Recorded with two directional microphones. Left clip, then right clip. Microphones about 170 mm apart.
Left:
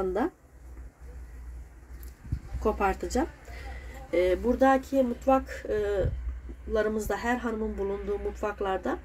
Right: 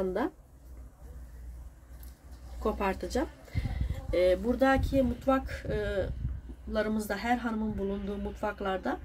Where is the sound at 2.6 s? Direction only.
15° left (ahead or behind).